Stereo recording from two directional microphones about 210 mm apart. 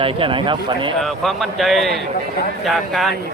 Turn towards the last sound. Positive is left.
turn(degrees=0)  # may be behind; listen again after turning